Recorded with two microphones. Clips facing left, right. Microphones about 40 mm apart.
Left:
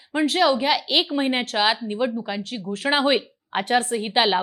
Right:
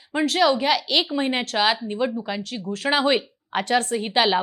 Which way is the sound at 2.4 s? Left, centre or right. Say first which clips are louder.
Even; left.